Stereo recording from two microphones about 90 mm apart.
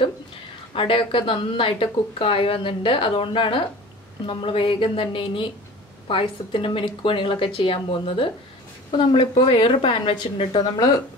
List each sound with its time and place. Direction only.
0.7 s speech: 75° left (ahead or behind)
8.9 s speech: 65° left (ahead or behind); by 10.1 s 80° left
10.3 s speech: 70° left (ahead or behind)